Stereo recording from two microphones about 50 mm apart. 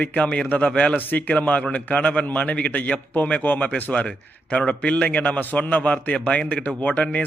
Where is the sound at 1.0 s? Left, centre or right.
Left.